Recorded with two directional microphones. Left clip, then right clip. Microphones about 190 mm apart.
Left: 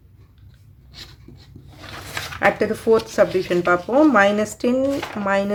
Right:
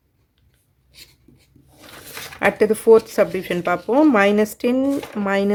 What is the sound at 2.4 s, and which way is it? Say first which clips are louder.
Speech: right 2 dB; 30° right (ahead or behind).